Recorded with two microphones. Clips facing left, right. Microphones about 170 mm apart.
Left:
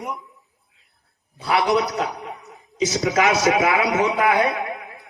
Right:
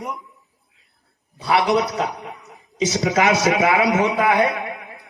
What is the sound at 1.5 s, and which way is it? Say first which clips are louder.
A man's voice: right 1 dB; 20° right (ahead or behind).